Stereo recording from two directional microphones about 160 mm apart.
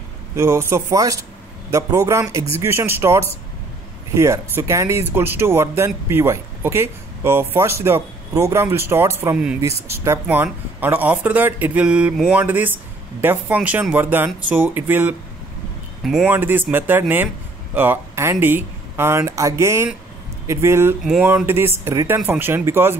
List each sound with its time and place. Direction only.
0.4 s a man's voice: 15° right (ahead or behind)
16.0 s speech: centre (ahead or behind)
16.3 s speech: 10° right (ahead or behind)
21.0 s speech: centre (ahead or behind)
21.5 s speech: 15° right (ahead or behind)